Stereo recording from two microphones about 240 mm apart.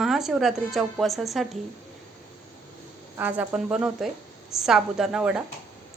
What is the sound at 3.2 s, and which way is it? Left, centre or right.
A woman's voice, centre.